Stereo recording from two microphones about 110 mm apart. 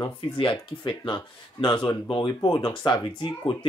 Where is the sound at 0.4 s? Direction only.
50° left (ahead or behind).